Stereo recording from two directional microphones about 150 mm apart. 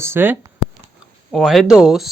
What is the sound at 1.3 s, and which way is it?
Speech, centre (ahead or behind).